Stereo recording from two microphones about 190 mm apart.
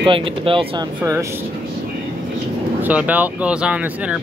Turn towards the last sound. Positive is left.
turn(degrees=-5)  # may be behind; listen again after turning